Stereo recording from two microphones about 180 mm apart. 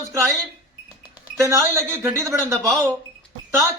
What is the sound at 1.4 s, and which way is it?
Speech, 15° right (ahead or behind).